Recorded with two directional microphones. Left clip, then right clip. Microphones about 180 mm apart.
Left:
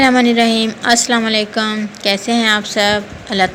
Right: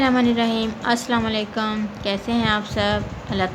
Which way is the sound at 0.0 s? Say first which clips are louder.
Left 8 dB; 20° left (ahead or behind).